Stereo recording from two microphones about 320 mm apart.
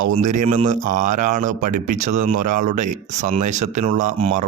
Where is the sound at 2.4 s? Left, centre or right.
Right.